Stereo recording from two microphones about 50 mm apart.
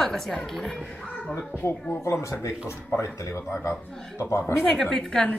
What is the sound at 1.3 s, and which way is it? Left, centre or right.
Speech, left.